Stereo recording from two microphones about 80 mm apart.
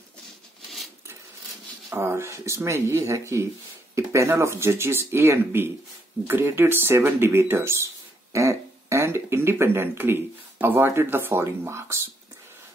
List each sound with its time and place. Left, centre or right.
2.0 s speech: right